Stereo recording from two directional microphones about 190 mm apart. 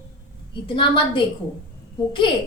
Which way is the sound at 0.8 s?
25° left (ahead or behind).